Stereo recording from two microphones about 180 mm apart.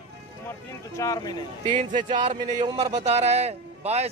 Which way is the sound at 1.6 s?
45° right (ahead or behind).